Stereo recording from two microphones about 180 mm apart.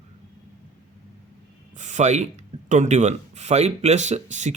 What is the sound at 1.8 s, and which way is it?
Speech, 40° right (ahead or behind).